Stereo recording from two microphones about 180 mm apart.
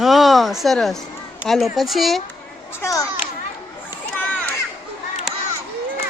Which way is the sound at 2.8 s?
20° left (ahead or behind).